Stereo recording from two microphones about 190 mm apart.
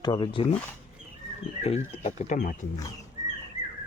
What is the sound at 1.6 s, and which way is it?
Speech, 35° left (ahead or behind).